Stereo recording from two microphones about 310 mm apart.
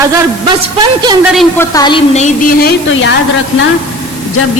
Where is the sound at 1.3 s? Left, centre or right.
Centre.